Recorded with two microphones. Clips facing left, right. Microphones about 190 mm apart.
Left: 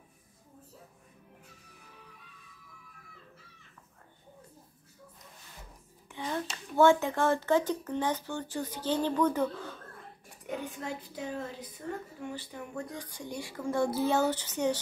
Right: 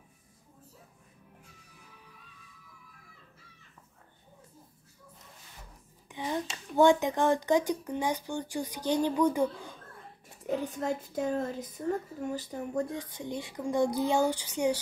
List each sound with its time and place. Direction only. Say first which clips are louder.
6.0 s a sound: right 2 dB; 15° right (ahead or behind)
6.8 s speech: right 1 dB; 15° right (ahead or behind)
10.4 s a woman's voice: right 6 dB; 40° right (ahead or behind)
12.8 s speech: right 4 dB; 25° right (ahead or behind)